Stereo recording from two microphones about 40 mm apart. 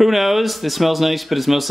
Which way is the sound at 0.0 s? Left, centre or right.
Centre.